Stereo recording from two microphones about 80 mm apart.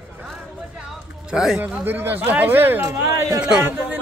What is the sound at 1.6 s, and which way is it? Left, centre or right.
Speech, right.